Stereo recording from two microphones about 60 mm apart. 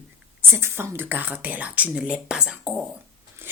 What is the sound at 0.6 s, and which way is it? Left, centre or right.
Speech, right.